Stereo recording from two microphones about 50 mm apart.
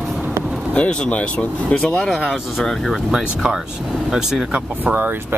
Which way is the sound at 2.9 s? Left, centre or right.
Centre.